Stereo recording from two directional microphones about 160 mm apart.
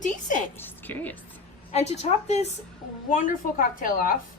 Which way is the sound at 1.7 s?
45° left (ahead or behind).